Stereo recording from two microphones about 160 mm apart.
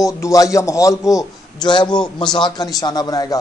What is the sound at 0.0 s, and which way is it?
A man's voice, 20° left (ahead or behind).